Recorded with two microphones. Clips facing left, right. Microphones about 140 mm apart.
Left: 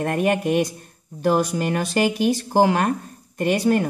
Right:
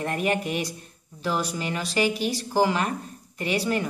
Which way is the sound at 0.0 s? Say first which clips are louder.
Left 5 dB; 55° left (ahead or behind).